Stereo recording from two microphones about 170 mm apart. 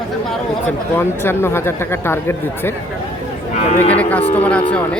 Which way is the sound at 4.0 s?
10° left (ahead or behind).